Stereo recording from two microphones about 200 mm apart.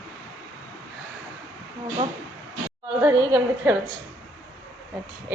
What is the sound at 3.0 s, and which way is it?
Speech, 10° right (ahead or behind).